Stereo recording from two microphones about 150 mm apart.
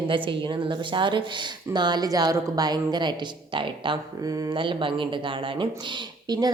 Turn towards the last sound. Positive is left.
turn(degrees=-25)  # may be behind; listen again after turning